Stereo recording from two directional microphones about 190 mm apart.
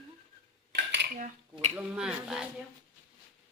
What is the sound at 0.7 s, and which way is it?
Cutlery, 65° right (ahead or behind).